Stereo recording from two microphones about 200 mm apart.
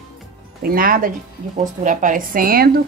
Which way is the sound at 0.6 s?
45° right (ahead or behind).